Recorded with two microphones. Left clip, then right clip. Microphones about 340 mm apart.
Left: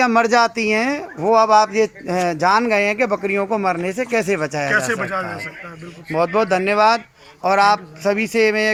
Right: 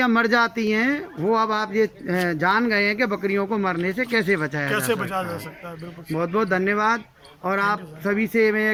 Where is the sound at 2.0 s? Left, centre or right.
Centre.